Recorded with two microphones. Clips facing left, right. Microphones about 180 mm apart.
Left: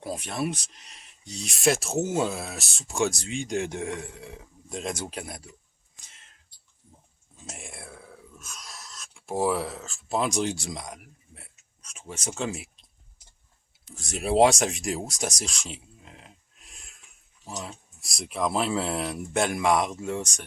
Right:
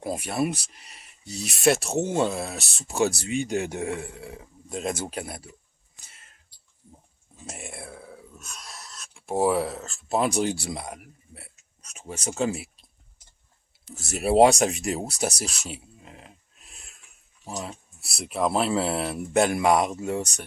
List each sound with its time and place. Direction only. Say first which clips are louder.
0.0 s speech: right 4 dB; 10° right (ahead or behind)
6.1 s whispering: right 2 dB; 5° right (ahead or behind)
7.4 s a sound: right 4 dB; centre (ahead or behind)
10.7 s speech: right 3 dB; 5° right (ahead or behind)
13.9 s speech: right 3 dB; 5° right (ahead or behind)